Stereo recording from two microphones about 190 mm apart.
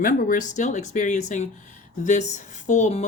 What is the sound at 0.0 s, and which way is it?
A woman's voice, 45° left (ahead or behind).